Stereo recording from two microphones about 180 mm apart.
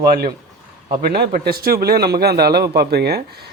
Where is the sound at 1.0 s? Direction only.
55° right (ahead or behind).